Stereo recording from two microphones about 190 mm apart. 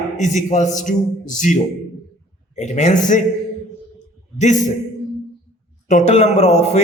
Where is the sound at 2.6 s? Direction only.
40° left (ahead or behind).